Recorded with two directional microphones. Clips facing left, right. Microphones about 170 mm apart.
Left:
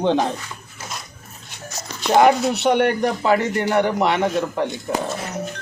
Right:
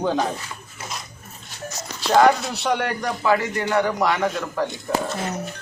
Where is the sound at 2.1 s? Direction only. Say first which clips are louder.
Left 2 dB; 20° left (ahead or behind).